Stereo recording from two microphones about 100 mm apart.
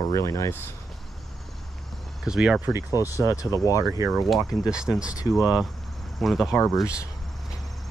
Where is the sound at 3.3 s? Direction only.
35° left (ahead or behind).